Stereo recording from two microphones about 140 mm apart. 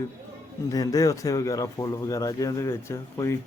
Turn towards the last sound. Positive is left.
turn(degrees=20)  # may be behind; listen again after turning